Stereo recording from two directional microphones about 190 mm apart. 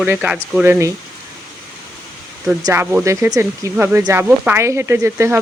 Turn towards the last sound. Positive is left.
turn(degrees=-15)  # may be behind; listen again after turning